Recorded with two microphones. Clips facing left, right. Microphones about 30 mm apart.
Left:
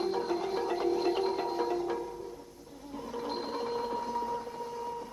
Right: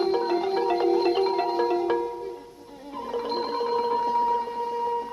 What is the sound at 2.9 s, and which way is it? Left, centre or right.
Music, right.